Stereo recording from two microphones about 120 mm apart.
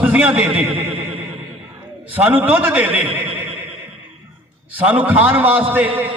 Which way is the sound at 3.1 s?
15° right (ahead or behind).